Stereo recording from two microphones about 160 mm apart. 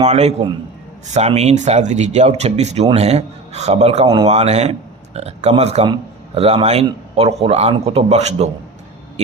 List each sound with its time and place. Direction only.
0.1 s a man's voice: 45° right (ahead or behind)